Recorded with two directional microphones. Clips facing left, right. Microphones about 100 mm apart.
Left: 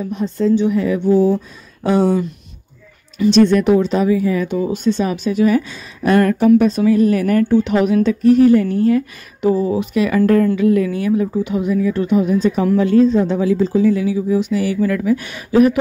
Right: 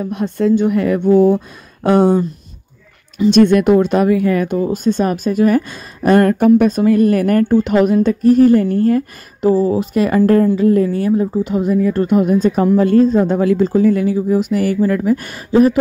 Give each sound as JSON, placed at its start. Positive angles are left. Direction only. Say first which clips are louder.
{"t": 0.0, "sound": "speech", "louder": "right 2 dB", "side_deg": -60}
{"t": 3.3, "sound": "a woman's voice", "louder": "right 2 dB", "side_deg": -55}